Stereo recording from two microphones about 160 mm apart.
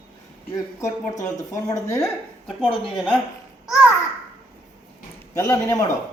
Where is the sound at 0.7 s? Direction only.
20° left (ahead or behind).